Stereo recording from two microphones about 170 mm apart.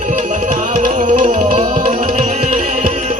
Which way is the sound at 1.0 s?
35° right (ahead or behind).